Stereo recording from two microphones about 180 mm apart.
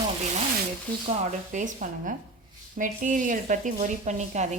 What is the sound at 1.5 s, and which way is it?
Speech, 45° right (ahead or behind).